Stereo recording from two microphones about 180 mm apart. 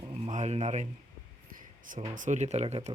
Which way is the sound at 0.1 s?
40° right (ahead or behind).